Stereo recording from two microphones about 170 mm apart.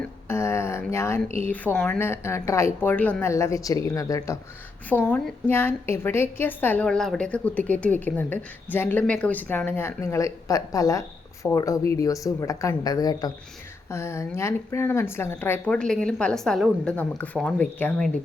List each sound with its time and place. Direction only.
0.0 s speech: 15° left (ahead or behind)